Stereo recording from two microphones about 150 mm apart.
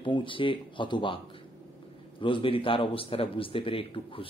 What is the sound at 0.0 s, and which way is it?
A man's voice, 35° left (ahead or behind).